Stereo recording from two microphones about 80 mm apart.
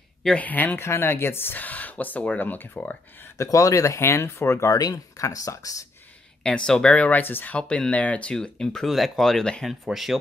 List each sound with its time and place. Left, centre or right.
0.4 s speech: left
3.3 s speech: left
4.7 s speech: left
6.4 s speech: centre; by 7.5 s left
7.5 s speech: centre
9.7 s speech: centre